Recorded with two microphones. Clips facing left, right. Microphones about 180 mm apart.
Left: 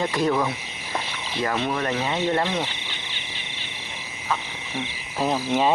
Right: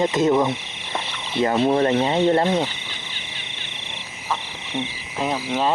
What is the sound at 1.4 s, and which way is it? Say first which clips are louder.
Speech: right 7 dB; 30° right (ahead or behind).